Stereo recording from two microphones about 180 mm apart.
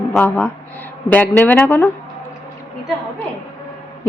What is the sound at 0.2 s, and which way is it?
Speech, 10° left (ahead or behind).